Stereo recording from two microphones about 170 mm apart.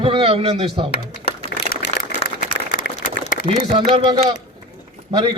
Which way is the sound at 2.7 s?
55° left (ahead or behind).